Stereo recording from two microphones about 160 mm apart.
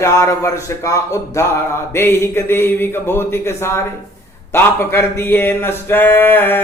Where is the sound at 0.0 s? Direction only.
20° left (ahead or behind).